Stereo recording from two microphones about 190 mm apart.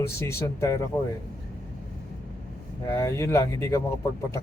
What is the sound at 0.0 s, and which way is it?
Speech, 15° left (ahead or behind).